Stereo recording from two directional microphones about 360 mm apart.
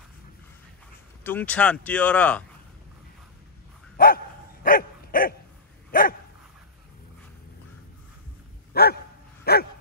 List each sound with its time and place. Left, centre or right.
1.2 s speech: centre
3.9 s dog: left
8.7 s dog: left